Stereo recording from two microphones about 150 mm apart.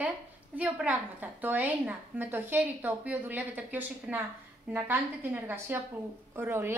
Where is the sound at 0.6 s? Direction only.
10° right (ahead or behind).